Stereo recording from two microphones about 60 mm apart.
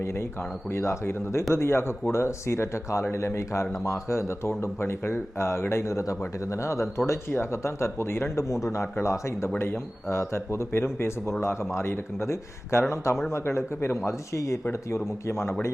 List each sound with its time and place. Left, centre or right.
0.0 s a man's voice: left